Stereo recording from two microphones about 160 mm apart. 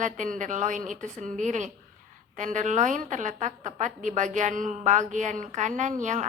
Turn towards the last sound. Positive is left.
turn(degrees=-50)  # may be behind; listen again after turning